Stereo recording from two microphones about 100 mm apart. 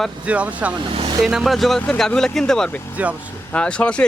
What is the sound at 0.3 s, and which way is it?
Speech, 15° right (ahead or behind).